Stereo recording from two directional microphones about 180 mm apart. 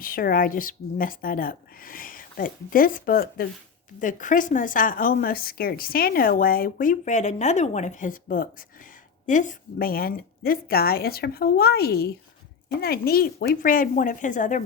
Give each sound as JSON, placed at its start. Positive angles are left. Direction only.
{"t": 0.0, "sound": "a woman's voice", "side_deg": 55}